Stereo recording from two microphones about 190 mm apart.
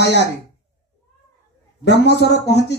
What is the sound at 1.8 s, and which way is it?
Speech, 65° left (ahead or behind).